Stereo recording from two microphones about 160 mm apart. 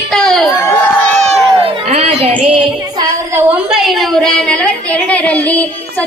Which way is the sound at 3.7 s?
Centre (ahead or behind).